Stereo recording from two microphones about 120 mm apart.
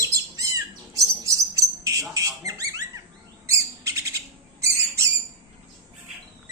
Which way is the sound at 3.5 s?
25° right (ahead or behind).